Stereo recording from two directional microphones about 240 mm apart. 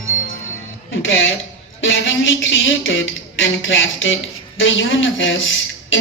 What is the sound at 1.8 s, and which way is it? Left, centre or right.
Speech, left.